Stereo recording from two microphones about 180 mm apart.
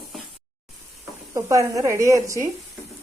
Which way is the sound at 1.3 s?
15° right (ahead or behind).